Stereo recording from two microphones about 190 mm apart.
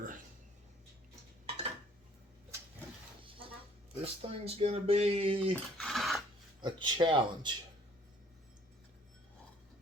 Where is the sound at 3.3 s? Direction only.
30° right (ahead or behind).